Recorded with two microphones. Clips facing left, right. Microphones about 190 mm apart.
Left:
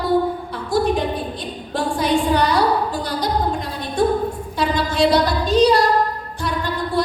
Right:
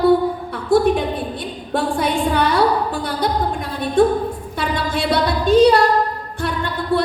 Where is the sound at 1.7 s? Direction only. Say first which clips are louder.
Even; 55° right (ahead or behind).